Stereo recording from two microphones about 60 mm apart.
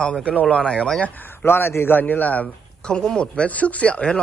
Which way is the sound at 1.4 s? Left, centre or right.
Left.